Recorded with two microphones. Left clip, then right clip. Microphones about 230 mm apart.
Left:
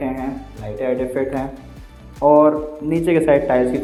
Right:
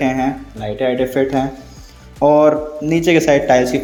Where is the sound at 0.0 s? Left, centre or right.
Right.